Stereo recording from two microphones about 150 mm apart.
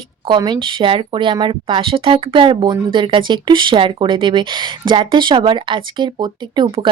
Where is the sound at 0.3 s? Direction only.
30° right (ahead or behind).